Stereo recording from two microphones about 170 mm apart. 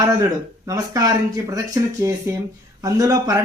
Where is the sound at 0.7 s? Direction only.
20° right (ahead or behind).